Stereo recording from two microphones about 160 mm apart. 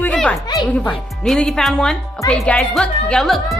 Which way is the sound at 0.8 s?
5° left (ahead or behind).